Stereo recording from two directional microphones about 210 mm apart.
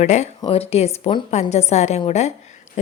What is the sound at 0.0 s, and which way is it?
A woman's voice, 35° left (ahead or behind).